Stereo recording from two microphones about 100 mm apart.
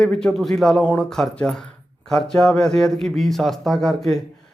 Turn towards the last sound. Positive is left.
turn(degrees=5)  # may be behind; listen again after turning